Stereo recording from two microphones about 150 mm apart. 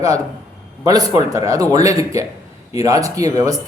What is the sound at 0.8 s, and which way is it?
Speech, 25° right (ahead or behind).